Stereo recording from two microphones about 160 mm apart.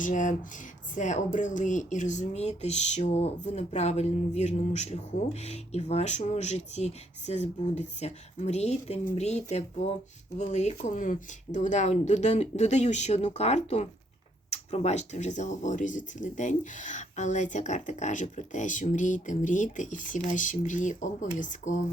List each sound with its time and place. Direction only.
0.0 s speech: 50° left (ahead or behind)